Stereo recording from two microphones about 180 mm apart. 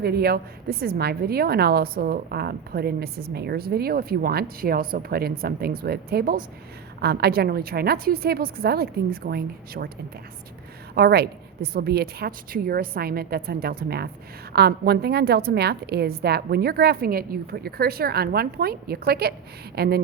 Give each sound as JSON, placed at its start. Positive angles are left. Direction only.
{"t": 0.0, "sound": "a woman's voice", "side_deg": -60}
{"t": 10.9, "sound": "a woman's voice", "side_deg": -60}